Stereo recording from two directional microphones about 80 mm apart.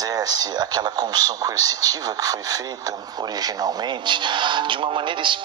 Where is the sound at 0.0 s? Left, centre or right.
Right.